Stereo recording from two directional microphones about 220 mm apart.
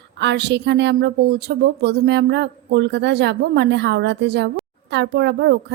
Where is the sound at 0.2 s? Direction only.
50° right (ahead or behind).